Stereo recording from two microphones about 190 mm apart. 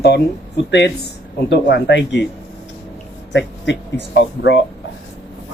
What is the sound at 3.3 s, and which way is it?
Speech, 65° left (ahead or behind).